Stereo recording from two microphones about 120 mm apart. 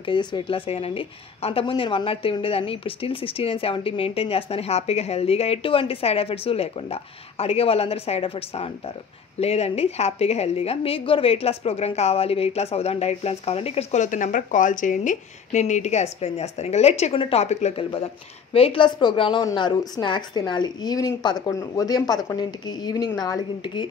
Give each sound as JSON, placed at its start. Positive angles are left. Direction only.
{"t": 0.0, "sound": "a woman's voice", "side_deg": 40}